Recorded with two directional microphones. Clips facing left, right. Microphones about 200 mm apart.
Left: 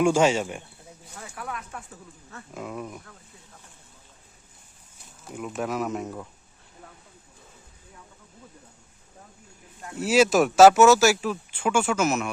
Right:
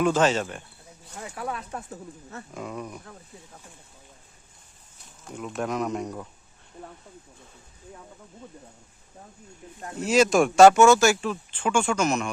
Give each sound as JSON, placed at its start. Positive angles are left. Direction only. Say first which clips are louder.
{"t": 0.0, "sound": "speech", "louder": "left 1 dB", "side_deg": 10}
{"t": 1.4, "sound": "speech", "louder": "right 4 dB", "side_deg": -30}
{"t": 2.5, "sound": "speech", "louder": "left 1 dB", "side_deg": 5}
{"t": 5.2, "sound": "speech", "louder": "even", "side_deg": 5}
{"t": 10.0, "sound": "speech", "louder": "even", "side_deg": 5}